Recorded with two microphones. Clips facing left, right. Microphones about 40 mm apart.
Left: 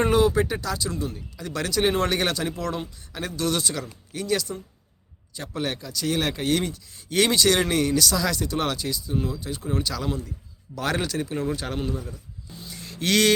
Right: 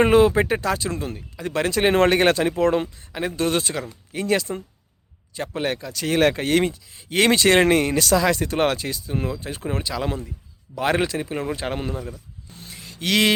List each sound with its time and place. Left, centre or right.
0.0 s speech: right
3.1 s speech: right
6.9 s speech: right
10.8 s speech: right
12.5 s a sound: right
12.8 s a sound: centre